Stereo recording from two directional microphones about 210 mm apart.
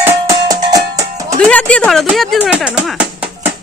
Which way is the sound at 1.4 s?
5° left (ahead or behind).